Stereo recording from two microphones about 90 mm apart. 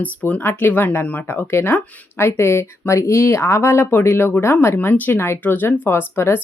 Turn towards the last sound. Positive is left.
turn(degrees=25)  # may be behind; listen again after turning